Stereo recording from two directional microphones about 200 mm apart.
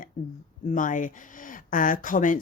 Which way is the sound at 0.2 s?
40° left (ahead or behind).